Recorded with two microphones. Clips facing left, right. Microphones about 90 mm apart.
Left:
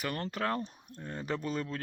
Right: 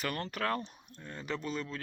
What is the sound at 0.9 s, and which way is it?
Speech, 35° left (ahead or behind).